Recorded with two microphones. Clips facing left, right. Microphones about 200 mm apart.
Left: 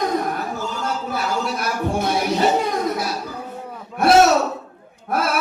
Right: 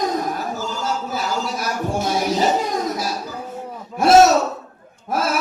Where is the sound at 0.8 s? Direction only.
60° left (ahead or behind).